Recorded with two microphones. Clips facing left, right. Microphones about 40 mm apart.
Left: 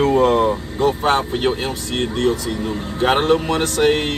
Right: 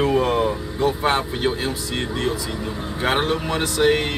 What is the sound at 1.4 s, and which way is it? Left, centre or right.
Speech, left.